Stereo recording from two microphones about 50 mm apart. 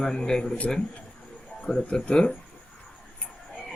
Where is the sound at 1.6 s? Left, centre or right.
Centre.